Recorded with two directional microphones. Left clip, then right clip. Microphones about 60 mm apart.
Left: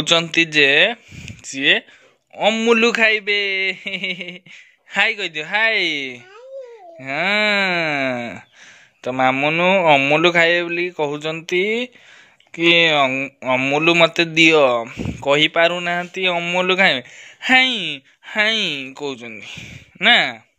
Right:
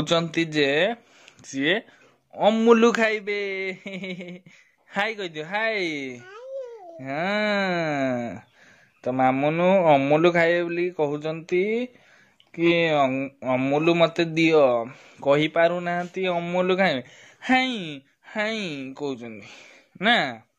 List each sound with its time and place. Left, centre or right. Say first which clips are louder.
0.0 s speech: left 7 dB; right
1.2 s speech: left 8 dB; right
2.3 s speech: left 2 dB; right
3.0 s speech: left 8 dB; right
7.3 s speech: left 7 dB; right
7.8 s speech: left 5 dB; centre
9.0 s speech: left 4 dB; right
15.2 s speech: left 5 dB; right
17.1 s a sound: left 10 dB; right
17.5 s speech: left 8 dB; right